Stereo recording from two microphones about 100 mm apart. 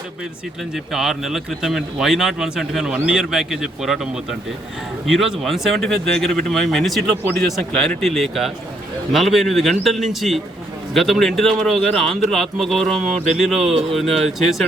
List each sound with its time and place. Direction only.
0.9 s a man's voice: centre (ahead or behind)